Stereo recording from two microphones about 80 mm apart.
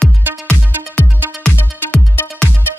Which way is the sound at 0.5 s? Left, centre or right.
Centre.